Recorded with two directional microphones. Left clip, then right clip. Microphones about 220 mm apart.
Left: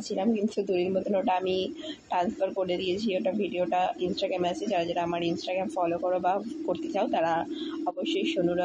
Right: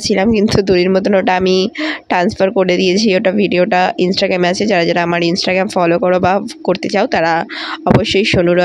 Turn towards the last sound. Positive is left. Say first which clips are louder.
# right 13 dB
turn(degrees=-50)  # may be behind; listen again after turning